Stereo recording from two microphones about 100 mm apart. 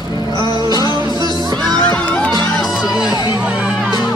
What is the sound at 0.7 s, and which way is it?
Music, 45° left (ahead or behind).